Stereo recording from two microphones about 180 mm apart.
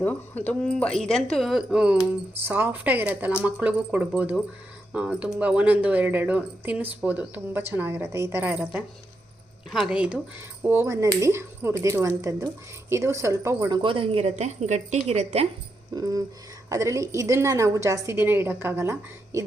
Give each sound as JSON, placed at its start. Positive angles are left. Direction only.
{"t": 0.0, "sound": "a woman's voice", "side_deg": 10}
{"t": 16.0, "sound": "a sound", "side_deg": -20}
{"t": 16.6, "sound": "speech", "side_deg": -15}